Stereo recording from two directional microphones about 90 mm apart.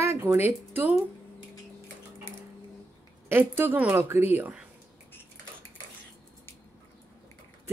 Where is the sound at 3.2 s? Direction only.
25° right (ahead or behind).